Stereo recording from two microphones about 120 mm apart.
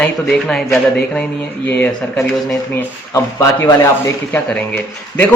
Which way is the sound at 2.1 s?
25° left (ahead or behind).